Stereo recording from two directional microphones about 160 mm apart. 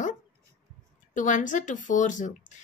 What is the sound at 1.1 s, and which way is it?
A woman's voice, 50° left (ahead or behind).